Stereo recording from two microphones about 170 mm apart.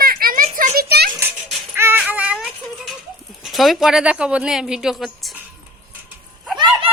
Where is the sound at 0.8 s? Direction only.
70° right (ahead or behind).